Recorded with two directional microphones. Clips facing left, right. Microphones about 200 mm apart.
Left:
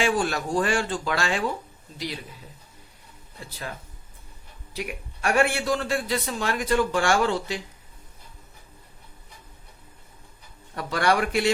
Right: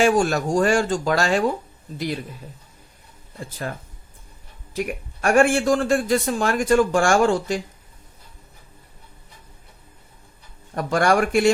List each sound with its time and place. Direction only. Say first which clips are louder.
0.0 s a man's voice: right 6 dB; 45° right (ahead or behind)
4.7 s a man's voice: right 7 dB; 50° right (ahead or behind)
10.8 s a man's voice: right 5 dB; 45° right (ahead or behind)